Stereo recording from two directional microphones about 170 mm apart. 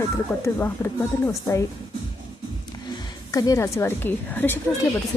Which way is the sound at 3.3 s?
20° left (ahead or behind).